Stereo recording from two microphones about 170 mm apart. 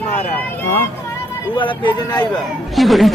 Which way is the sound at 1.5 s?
30° left (ahead or behind).